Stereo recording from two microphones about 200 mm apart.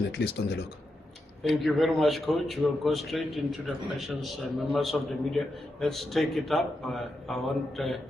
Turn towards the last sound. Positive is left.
turn(degrees=0)  # may be behind; listen again after turning